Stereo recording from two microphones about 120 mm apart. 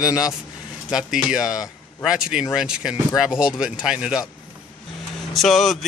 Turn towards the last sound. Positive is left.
turn(degrees=0)  # may be behind; listen again after turning